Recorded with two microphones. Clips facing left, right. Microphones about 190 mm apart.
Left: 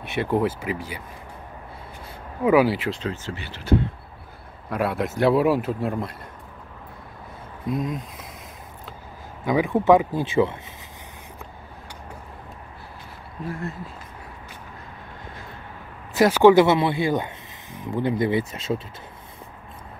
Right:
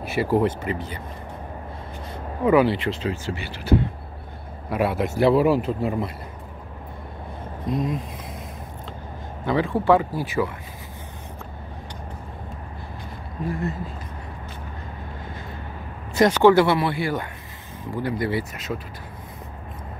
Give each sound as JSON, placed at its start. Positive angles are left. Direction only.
{"t": 0.0, "sound": "a man's voice", "side_deg": 0}
{"t": 2.4, "sound": "speech", "side_deg": 5}
{"t": 3.0, "sound": "a man's voice", "side_deg": -10}
{"t": 7.6, "sound": "a man's voice", "side_deg": 0}
{"t": 9.4, "sound": "speech", "side_deg": 15}
{"t": 13.5, "sound": "a man's voice", "side_deg": 0}
{"t": 16.2, "sound": "speech", "side_deg": 10}